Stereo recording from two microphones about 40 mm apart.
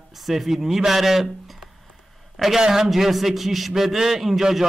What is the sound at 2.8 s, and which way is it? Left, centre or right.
A man's voice, centre.